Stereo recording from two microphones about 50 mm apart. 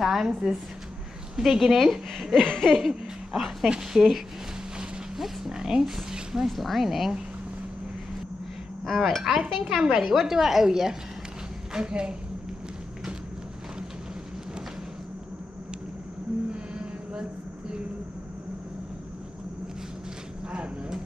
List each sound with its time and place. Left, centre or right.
0.0 s a woman's voice: centre
2.3 s laughter: centre
2.9 s speech: centre
8.8 s a woman's voice: centre
16.7 s a sound: centre
20.5 s a sound: right